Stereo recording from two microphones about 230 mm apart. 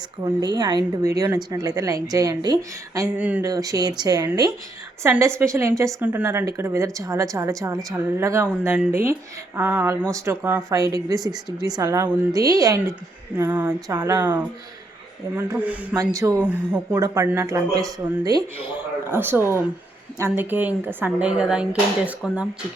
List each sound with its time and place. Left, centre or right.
0.3 s a woman's voice: centre